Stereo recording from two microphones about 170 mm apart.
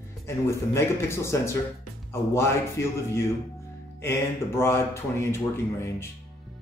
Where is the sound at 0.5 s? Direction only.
15° left (ahead or behind).